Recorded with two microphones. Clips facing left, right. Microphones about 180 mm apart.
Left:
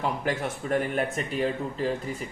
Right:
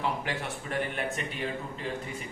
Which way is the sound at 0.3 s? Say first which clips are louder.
Left 7 dB; 45° left (ahead or behind).